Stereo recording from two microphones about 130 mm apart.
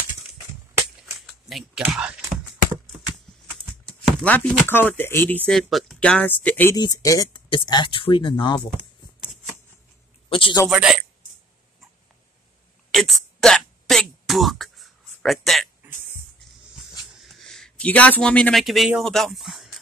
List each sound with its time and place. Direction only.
1.9 s a sound: 5° right (ahead or behind)
3.5 s speech: 5° left (ahead or behind)
5.5 s speech: centre (ahead or behind)
6.7 s speech: 25° left (ahead or behind)
7.3 s speech: 35° left (ahead or behind)
10.3 s speech: 40° left (ahead or behind)
10.7 s speech: 5° right (ahead or behind)
12.9 s a sound: centre (ahead or behind)
17.2 s speech: centre (ahead or behind)